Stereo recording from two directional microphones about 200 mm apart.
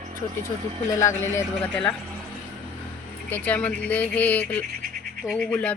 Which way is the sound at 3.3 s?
5° left (ahead or behind).